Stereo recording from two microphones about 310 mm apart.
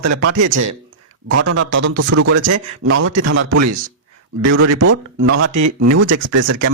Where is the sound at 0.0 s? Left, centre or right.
Right.